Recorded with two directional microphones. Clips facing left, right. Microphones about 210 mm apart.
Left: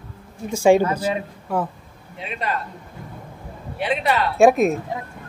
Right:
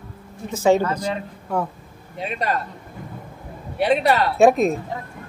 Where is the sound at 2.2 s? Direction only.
40° right (ahead or behind).